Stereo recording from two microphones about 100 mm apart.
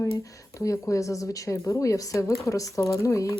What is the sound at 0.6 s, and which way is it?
Speech, 35° left (ahead or behind).